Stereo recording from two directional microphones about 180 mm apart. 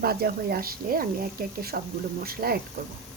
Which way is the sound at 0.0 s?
60° right (ahead or behind).